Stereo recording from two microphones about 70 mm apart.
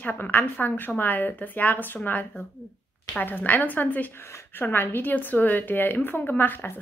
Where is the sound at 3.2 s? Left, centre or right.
Left.